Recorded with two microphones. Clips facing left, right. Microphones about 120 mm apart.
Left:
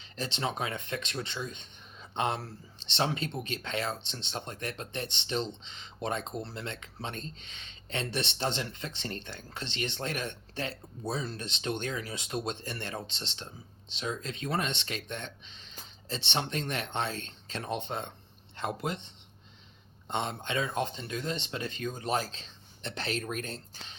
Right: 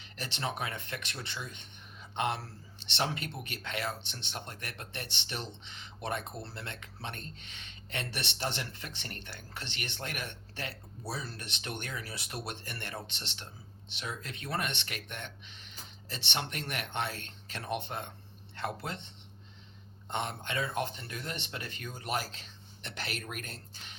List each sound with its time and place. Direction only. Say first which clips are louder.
0.0 s speech: left 3 dB; 20° left (ahead or behind)
20.1 s speech: left 3 dB; 20° left (ahead or behind)